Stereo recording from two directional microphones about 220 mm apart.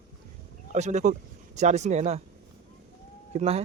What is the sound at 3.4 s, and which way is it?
Speech, 30° right (ahead or behind).